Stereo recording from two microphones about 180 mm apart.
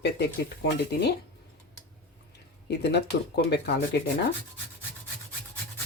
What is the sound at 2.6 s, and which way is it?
Speech, 70° left (ahead or behind).